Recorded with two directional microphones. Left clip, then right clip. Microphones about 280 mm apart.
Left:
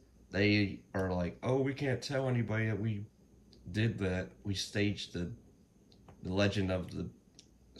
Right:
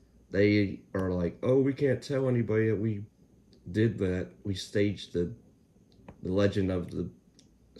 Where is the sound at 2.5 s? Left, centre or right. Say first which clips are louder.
Right 9 dB; left.